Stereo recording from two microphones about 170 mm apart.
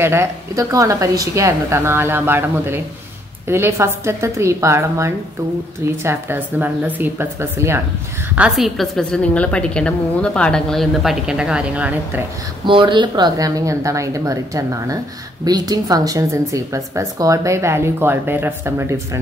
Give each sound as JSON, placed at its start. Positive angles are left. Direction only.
{"t": 0.0, "sound": "a woman's voice", "side_deg": -15}
{"t": 8.4, "sound": "a woman's voice", "side_deg": -5}
{"t": 12.6, "sound": "a woman's voice", "side_deg": -30}